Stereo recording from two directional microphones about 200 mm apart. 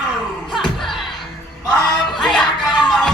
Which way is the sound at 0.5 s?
Centre (ahead or behind).